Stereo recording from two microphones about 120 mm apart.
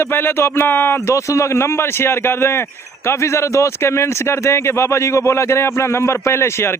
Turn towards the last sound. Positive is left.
turn(degrees=20)  # may be behind; listen again after turning